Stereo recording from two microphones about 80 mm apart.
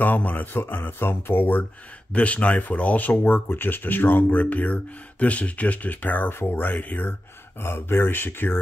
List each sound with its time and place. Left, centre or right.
0.0 s speech: left